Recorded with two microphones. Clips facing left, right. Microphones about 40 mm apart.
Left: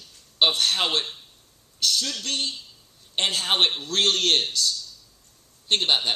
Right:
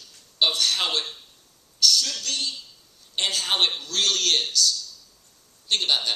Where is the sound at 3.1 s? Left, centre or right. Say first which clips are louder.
Left 1 dB; left.